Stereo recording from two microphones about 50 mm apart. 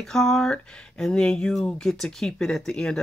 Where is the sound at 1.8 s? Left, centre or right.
Centre.